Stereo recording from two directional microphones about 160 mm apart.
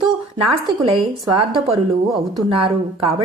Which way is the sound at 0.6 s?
35° right (ahead or behind).